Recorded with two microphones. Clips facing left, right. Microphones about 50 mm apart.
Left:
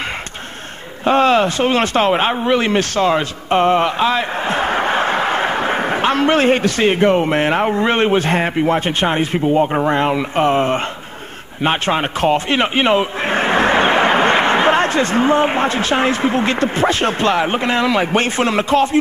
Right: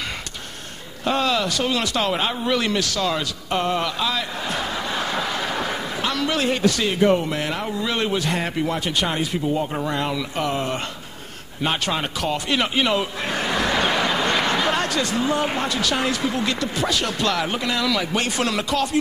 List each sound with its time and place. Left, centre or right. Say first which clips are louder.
1.0 s speech: left 8 dB; left